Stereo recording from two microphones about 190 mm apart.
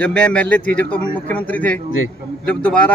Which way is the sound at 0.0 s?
5° left (ahead or behind).